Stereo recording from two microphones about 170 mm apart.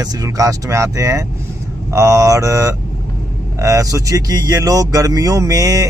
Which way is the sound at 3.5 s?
20° right (ahead or behind).